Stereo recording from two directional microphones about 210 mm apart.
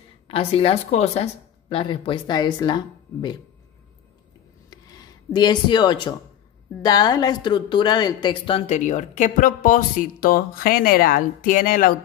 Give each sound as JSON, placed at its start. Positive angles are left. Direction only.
{"t": 0.3, "sound": "speech", "side_deg": 25}
{"t": 4.6, "sound": "a sound", "side_deg": 20}
{"t": 6.8, "sound": "speech", "side_deg": 20}